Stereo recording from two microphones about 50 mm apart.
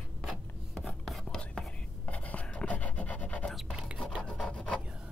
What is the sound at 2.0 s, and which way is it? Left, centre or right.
Filing, left.